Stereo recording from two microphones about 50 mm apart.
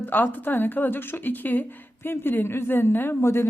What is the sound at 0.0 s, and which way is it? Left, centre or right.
Speech, left.